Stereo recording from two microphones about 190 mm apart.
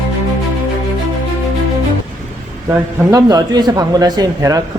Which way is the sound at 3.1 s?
20° right (ahead or behind).